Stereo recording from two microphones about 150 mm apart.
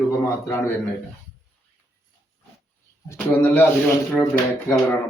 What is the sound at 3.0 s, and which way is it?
Speech, 15° left (ahead or behind).